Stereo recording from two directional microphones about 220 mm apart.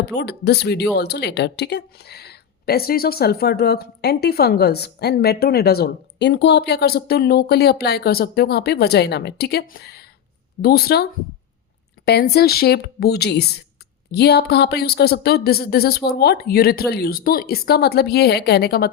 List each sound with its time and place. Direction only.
0.0 s a woman's voice: 50° left (ahead or behind)